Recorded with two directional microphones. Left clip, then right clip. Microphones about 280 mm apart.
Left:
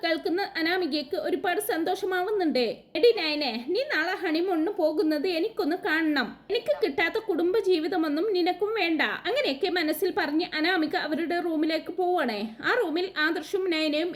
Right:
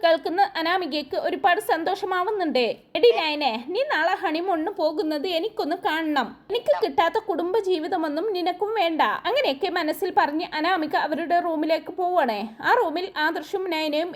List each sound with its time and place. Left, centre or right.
0.0 s a woman's voice: centre